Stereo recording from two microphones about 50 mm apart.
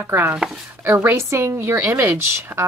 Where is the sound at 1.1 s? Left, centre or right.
Right.